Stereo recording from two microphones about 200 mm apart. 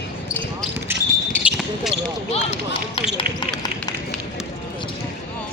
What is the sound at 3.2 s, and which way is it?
Basketball bounce, 20° left (ahead or behind).